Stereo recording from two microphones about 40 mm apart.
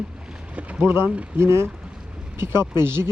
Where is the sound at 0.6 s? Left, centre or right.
Right.